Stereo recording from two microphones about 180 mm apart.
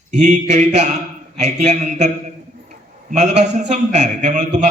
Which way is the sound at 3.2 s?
40° right (ahead or behind).